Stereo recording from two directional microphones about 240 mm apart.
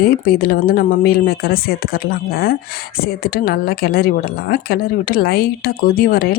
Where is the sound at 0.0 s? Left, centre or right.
Left.